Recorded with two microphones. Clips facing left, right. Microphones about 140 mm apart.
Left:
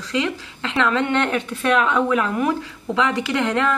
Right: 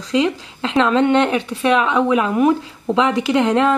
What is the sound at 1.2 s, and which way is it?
A woman's voice, 10° right (ahead or behind).